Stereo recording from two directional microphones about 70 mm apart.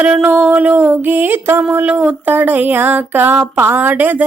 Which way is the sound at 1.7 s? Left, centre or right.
Centre.